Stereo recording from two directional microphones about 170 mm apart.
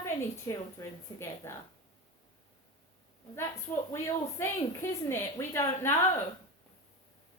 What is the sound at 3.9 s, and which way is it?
A woman's voice, 15° left (ahead or behind).